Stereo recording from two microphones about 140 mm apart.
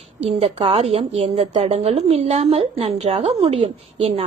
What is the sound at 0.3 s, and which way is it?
A woman's voice, 45° right (ahead or behind).